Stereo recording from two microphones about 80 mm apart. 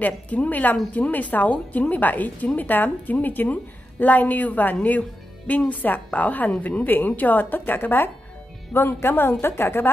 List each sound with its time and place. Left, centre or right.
0.0 s a woman's voice: centre